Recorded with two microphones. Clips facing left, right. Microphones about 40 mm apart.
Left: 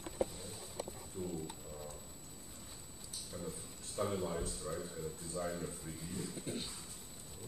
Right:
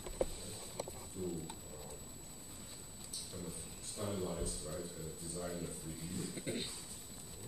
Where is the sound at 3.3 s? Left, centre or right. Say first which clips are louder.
Left 3 dB; left.